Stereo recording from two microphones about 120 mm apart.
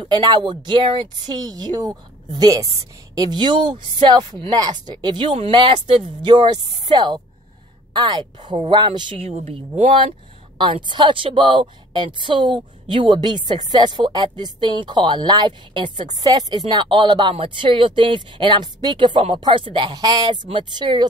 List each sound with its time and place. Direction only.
0.0 s a woman's voice: 40° right (ahead or behind)
9.3 s a woman's voice: 65° right (ahead or behind); by 21.1 s 40° right (ahead or behind)